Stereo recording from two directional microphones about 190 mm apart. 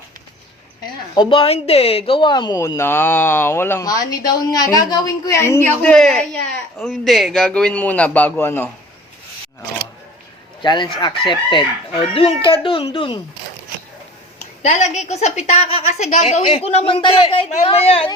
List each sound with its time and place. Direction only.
1.1 s a woman's voice: 25° left (ahead or behind)
10.6 s speech: 25° left (ahead or behind)
14.6 s a woman's voice: 35° left (ahead or behind)